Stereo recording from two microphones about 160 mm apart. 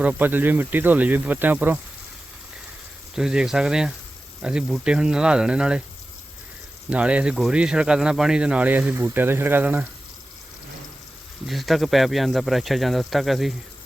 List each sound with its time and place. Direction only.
0.0 s speech: 10° right (ahead or behind)
3.2 s speech: 5° right (ahead or behind)
6.9 s speech: 5° right (ahead or behind)
11.4 s speech: centre (ahead or behind)